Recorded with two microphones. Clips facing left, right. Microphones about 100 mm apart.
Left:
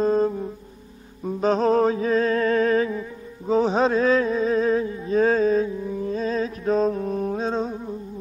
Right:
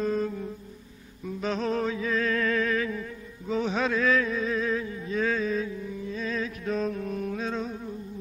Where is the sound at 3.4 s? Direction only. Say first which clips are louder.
Left 8 dB; 35° left (ahead or behind).